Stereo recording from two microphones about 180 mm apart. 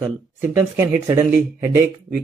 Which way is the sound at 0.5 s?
15° right (ahead or behind).